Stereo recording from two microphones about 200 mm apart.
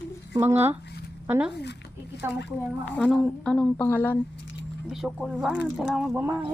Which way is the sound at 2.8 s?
5° left (ahead or behind).